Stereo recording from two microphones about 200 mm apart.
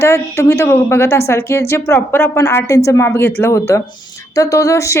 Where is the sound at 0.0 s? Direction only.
15° left (ahead or behind).